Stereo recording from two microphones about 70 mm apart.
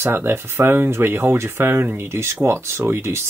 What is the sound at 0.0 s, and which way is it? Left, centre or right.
Speech, right.